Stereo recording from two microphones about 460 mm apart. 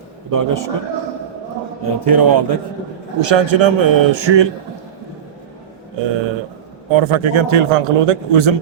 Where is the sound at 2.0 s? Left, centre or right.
Right.